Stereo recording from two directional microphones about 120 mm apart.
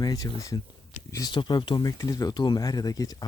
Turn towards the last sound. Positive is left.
turn(degrees=30)  # may be behind; listen again after turning